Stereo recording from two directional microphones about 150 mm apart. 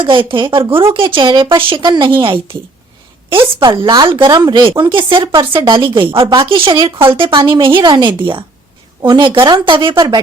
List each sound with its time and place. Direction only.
0.0 s a woman's voice: 35° right (ahead or behind)